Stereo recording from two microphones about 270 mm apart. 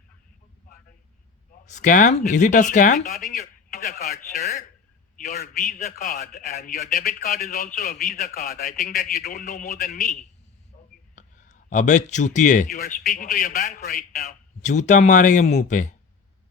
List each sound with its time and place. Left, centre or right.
1.6 s a man's voice: left